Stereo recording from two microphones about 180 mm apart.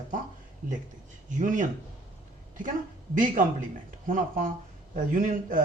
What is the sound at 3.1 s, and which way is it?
A man's voice, 45° right (ahead or behind).